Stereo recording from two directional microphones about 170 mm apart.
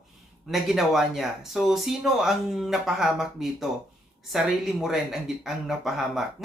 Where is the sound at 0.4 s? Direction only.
Centre (ahead or behind).